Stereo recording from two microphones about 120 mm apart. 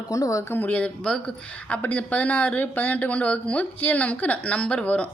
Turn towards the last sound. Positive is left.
turn(degrees=10)  # may be behind; listen again after turning